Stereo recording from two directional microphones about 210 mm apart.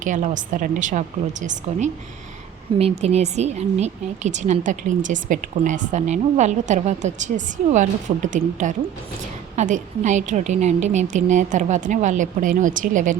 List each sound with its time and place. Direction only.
0.0 s speech: 35° right (ahead or behind)